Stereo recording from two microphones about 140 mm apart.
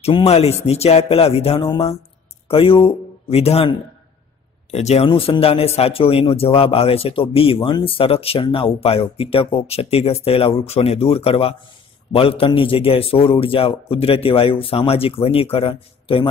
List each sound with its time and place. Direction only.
0.0 s a man's voice: 45° left (ahead or behind)